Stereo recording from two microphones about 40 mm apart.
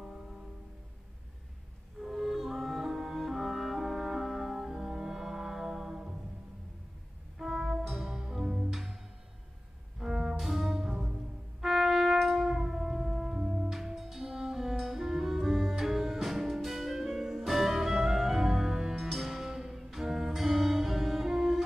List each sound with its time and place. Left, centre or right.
2.0 s music: centre
7.3 s music: centre
9.9 s music: centre
11.6 s brass instrument: centre
13.4 s music: right
13.7 s music: centre
18.9 s music: centre